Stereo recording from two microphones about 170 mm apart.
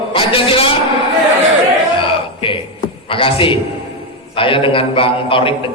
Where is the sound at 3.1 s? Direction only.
30° left (ahead or behind).